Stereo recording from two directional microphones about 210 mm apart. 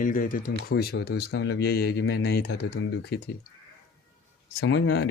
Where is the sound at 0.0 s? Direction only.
40° left (ahead or behind).